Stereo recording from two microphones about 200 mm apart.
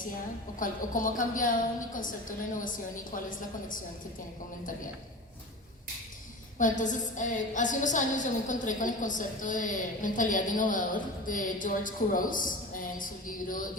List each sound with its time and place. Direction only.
0.6 s a woman's voice: 45° left (ahead or behind)
6.6 s a woman's voice: 40° left (ahead or behind)